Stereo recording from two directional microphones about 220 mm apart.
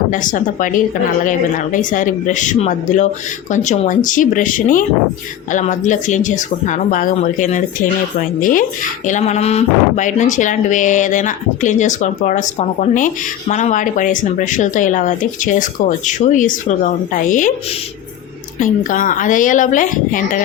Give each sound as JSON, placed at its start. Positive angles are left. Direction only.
{"t": 0.1, "sound": "speech", "side_deg": 35}
{"t": 18.6, "sound": "speech", "side_deg": 35}